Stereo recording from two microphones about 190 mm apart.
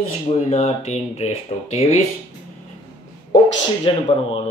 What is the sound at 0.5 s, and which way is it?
Speech, 35° left (ahead or behind).